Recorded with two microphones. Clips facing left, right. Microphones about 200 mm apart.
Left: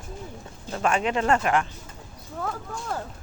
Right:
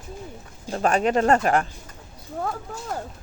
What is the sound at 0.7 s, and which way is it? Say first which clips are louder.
Speech: right 4 dB; 40° right (ahead or behind).